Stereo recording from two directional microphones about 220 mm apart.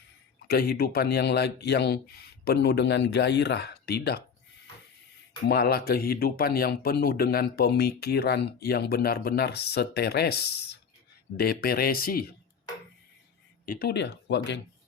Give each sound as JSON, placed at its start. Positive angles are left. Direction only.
{"t": 0.4, "sound": "speech", "side_deg": 45}
{"t": 5.5, "sound": "speech", "side_deg": 45}
{"t": 13.7, "sound": "speech", "side_deg": 45}